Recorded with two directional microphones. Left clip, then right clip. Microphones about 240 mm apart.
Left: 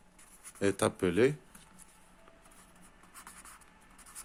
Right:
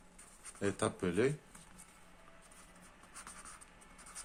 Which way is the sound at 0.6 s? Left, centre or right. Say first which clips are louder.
Left 6 dB; left.